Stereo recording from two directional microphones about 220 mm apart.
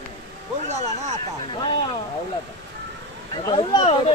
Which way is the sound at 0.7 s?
30° right (ahead or behind).